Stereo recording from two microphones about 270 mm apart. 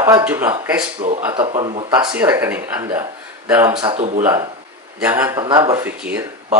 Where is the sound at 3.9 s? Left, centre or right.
Right.